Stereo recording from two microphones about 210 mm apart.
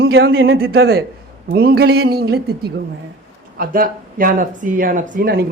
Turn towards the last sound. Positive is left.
turn(degrees=-45)  # may be behind; listen again after turning